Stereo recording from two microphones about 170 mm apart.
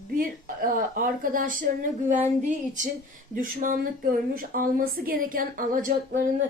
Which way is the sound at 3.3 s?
55° right (ahead or behind).